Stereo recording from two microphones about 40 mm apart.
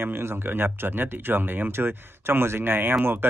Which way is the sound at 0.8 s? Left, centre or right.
Right.